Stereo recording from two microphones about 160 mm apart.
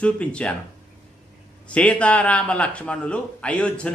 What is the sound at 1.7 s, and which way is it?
Speech, 5° left (ahead or behind).